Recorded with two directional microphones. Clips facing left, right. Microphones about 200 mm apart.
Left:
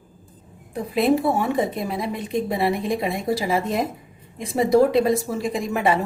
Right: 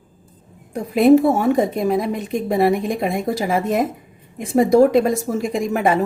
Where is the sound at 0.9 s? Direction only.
45° right (ahead or behind).